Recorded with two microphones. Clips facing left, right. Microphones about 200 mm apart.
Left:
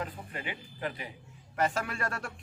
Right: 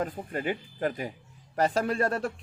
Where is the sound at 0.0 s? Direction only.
45° right (ahead or behind).